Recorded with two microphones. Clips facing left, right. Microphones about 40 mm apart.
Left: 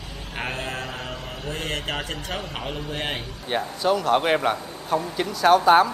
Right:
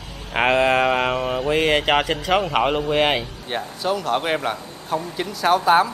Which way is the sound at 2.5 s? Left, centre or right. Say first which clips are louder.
Right 12 dB; right.